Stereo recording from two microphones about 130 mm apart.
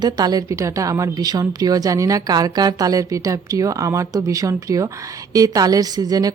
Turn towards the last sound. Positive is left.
turn(degrees=-30)  # may be behind; listen again after turning